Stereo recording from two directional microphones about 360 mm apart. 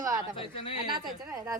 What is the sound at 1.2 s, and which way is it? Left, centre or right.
Speech, centre.